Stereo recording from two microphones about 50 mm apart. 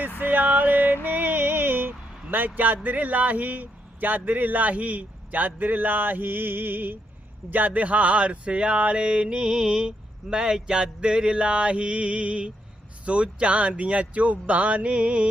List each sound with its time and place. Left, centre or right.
0.2 s music: right
1.0 s vehicle: right
2.6 s speech: right
7.5 s a sound: right